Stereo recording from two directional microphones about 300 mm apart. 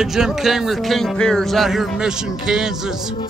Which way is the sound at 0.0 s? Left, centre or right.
Centre.